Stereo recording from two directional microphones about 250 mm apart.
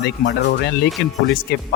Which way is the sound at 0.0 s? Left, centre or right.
Left.